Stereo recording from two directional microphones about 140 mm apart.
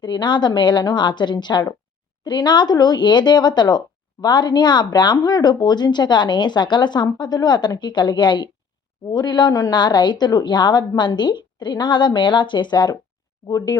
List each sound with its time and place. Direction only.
0.0 s speech: 35° left (ahead or behind)